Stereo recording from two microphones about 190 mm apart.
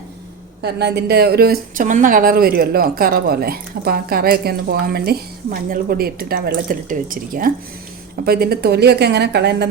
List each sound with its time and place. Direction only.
0.6 s a woman's voice: 60° right (ahead or behind)